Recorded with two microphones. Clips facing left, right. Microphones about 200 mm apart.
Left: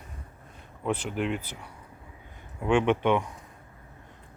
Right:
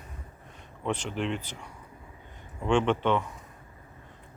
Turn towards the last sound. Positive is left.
turn(degrees=10)  # may be behind; listen again after turning